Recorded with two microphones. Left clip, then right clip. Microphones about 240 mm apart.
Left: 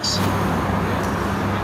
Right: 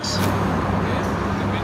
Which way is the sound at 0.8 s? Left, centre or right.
Centre.